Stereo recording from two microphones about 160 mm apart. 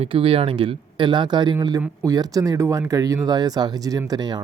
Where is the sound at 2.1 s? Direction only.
25° right (ahead or behind).